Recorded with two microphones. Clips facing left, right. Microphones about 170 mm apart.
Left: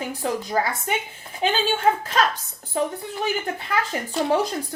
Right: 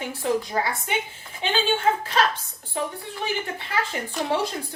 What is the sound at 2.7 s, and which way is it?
Speech, 40° left (ahead or behind).